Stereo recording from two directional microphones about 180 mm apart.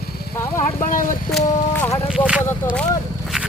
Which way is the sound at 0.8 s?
50° left (ahead or behind).